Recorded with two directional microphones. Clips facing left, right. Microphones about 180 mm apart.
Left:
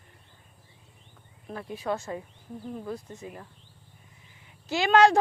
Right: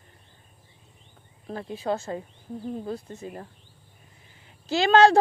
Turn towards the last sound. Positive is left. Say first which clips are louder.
# right 3 dB
turn(degrees=-30)  # may be behind; listen again after turning